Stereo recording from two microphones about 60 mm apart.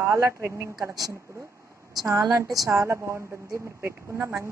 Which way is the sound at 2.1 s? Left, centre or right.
Right.